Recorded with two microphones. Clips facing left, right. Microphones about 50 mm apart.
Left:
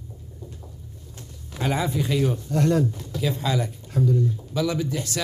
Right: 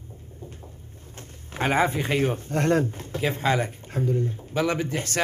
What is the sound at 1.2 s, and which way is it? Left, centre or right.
Speech, right.